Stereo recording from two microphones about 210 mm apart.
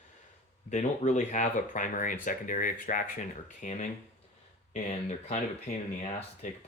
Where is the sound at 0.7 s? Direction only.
35° left (ahead or behind).